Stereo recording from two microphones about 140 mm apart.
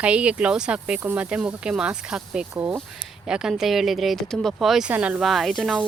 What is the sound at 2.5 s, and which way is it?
Speech, 20° right (ahead or behind).